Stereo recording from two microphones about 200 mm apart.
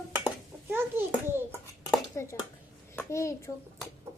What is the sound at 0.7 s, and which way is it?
Bouncing, 10° right (ahead or behind).